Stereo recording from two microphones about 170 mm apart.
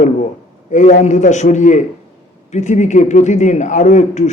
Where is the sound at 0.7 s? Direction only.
45° left (ahead or behind).